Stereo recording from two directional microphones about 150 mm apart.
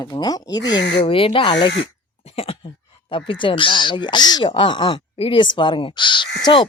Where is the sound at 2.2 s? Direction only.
40° left (ahead or behind).